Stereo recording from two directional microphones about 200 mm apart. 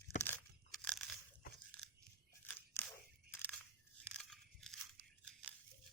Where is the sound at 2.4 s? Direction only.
10° left (ahead or behind).